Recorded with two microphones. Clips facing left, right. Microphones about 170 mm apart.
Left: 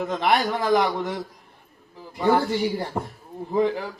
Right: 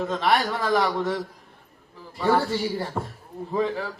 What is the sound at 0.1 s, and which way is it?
A man's voice, 20° left (ahead or behind).